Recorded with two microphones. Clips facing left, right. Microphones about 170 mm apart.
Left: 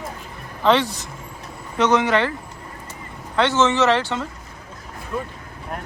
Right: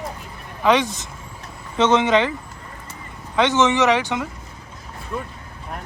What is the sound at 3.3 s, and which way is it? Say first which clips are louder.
Speech: right 1 dB; 15° right (ahead or behind).